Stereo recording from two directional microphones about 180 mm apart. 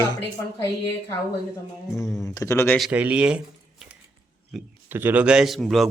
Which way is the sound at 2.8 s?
10° right (ahead or behind).